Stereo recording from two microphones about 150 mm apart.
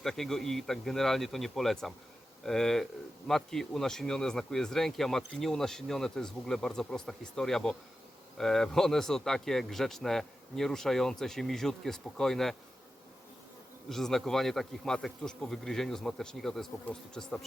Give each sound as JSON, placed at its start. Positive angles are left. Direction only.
{"t": 0.0, "sound": "speech", "side_deg": 5}
{"t": 13.9, "sound": "speech", "side_deg": 0}